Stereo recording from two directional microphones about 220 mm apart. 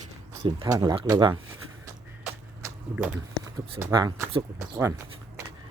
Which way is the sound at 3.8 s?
15° right (ahead or behind).